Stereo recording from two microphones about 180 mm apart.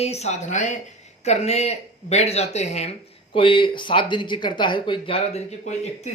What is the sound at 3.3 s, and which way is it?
A woman's voice, 30° left (ahead or behind).